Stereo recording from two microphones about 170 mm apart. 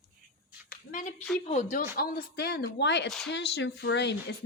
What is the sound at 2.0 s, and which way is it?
A woman's voice, 60° left (ahead or behind).